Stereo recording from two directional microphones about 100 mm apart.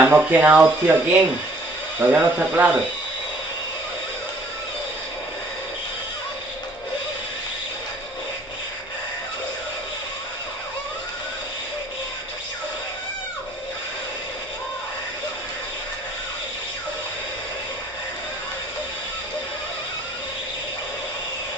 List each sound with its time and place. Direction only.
0.0 s speech: 15° right (ahead or behind)